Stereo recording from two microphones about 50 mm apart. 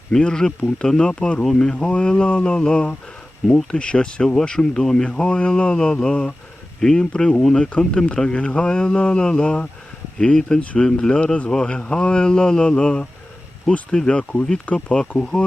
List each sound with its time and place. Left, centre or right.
0.1 s speech: centre
10.6 s speech: left
10.8 s speech: centre